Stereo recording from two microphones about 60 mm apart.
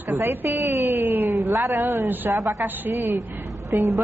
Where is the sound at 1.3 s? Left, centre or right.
Right.